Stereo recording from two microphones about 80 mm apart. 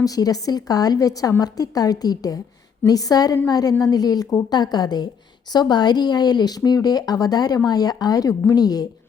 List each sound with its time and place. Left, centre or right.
0.0 s a woman's voice: left